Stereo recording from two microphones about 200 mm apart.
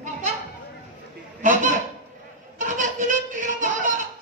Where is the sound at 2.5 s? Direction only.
40° right (ahead or behind).